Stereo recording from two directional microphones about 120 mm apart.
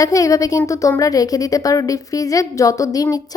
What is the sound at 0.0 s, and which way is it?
A woman's voice, 30° left (ahead or behind).